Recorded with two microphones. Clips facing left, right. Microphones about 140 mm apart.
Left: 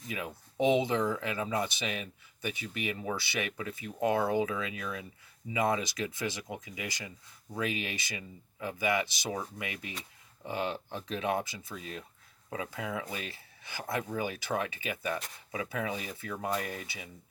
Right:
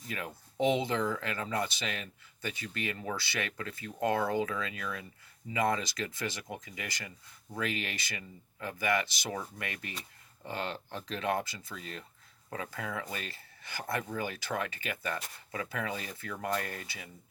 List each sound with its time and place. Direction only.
0.1 s speech: 15° left (ahead or behind)